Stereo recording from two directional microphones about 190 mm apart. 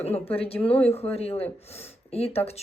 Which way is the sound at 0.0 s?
30° left (ahead or behind).